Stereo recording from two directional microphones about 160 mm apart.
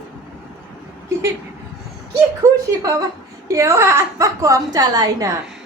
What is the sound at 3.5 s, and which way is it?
A woman's voice, 20° right (ahead or behind).